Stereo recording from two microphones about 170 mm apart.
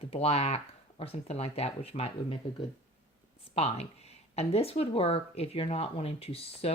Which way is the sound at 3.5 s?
40° left (ahead or behind).